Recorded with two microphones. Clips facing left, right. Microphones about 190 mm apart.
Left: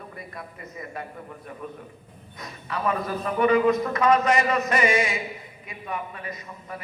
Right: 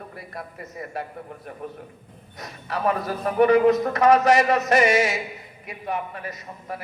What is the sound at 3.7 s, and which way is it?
A man's voice, 75° right (ahead or behind).